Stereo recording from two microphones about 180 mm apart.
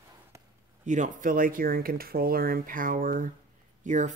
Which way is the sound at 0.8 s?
45° right (ahead or behind).